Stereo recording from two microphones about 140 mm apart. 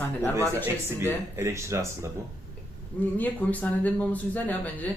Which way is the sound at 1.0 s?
20° right (ahead or behind).